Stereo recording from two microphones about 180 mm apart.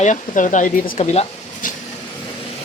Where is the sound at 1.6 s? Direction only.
50° left (ahead or behind).